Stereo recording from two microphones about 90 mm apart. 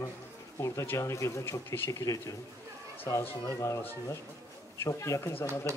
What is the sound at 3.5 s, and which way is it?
Speech, 35° left (ahead or behind).